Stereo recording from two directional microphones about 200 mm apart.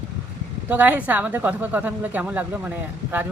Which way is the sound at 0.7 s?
10° right (ahead or behind).